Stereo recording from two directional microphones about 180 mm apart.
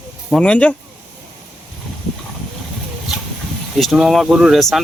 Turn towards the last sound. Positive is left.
turn(degrees=0)  # may be behind; listen again after turning